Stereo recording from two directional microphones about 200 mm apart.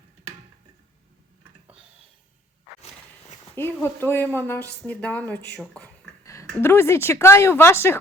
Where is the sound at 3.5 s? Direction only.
10° left (ahead or behind).